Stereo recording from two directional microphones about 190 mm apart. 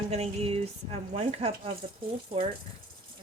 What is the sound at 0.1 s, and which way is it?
Speech, 30° right (ahead or behind).